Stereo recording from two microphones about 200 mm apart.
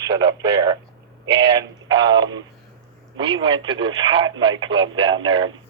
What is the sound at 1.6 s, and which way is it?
Speech, 20° right (ahead or behind).